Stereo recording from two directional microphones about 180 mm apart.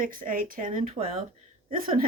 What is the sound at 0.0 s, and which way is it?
Speech, 50° right (ahead or behind).